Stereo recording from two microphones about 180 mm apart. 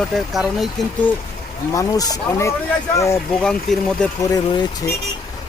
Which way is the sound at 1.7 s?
20° left (ahead or behind).